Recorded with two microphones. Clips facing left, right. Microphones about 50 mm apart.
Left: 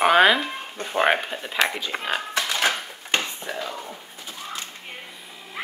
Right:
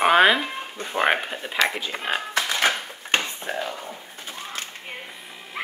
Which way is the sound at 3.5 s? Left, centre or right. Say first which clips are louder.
Right 5 dB; right.